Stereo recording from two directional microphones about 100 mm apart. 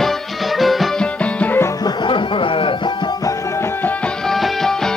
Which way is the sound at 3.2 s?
30° left (ahead or behind).